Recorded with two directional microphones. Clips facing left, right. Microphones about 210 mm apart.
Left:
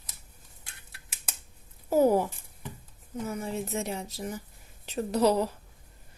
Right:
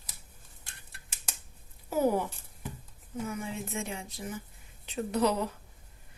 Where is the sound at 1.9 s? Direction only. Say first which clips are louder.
Left 5 dB; 40° left (ahead or behind).